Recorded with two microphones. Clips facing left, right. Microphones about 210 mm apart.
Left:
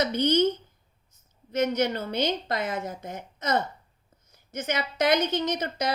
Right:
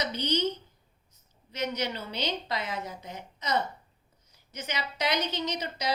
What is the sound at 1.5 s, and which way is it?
A woman's voice, 50° left (ahead or behind).